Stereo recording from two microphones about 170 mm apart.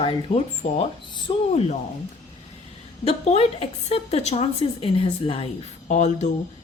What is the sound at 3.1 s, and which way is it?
A woman's voice, 35° left (ahead or behind).